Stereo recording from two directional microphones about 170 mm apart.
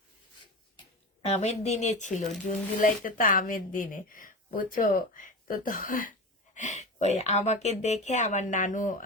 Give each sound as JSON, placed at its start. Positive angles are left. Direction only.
{"t": 0.8, "sound": "speech", "side_deg": 40}